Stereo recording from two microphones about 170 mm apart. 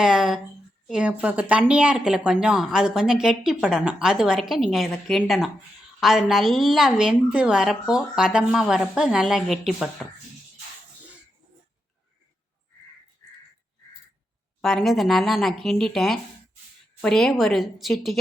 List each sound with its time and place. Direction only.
0.0 s a sound: 5° right (ahead or behind)
0.9 s a woman's voice: 5° right (ahead or behind)
14.6 s a woman's voice: centre (ahead or behind)